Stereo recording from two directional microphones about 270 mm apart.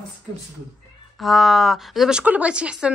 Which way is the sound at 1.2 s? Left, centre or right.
Centre.